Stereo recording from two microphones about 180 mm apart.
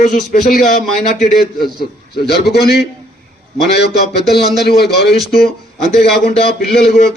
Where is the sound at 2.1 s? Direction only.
60° left (ahead or behind).